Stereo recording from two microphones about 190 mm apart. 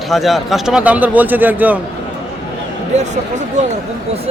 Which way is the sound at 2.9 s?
40° right (ahead or behind).